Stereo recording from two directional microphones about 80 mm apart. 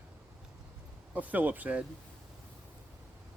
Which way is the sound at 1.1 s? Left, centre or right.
Right.